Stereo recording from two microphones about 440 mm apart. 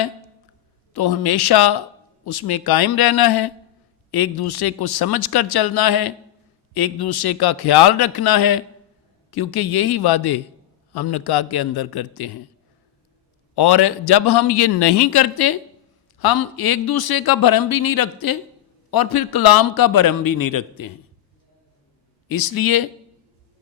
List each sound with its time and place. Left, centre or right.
0.9 s a man's voice: left
13.6 s a man's voice: left
22.3 s speech: left